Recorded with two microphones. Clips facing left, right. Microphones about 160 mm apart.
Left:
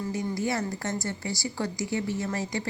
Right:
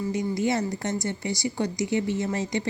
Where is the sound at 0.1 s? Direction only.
20° right (ahead or behind).